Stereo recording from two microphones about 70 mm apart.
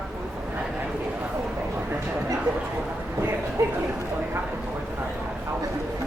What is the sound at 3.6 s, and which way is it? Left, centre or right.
Speech, right.